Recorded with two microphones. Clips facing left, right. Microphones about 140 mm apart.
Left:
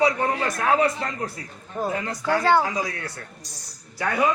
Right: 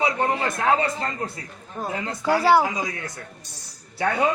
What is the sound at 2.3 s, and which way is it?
Speech, 10° right (ahead or behind).